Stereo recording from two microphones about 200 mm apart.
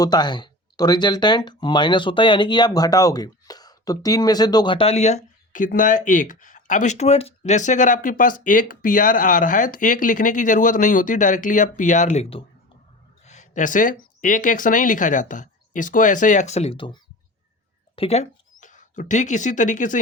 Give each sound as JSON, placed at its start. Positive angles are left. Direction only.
{"t": 0.0, "sound": "speech", "side_deg": 20}
{"t": 13.2, "sound": "a sound", "side_deg": 35}
{"t": 14.2, "sound": "speech", "side_deg": 40}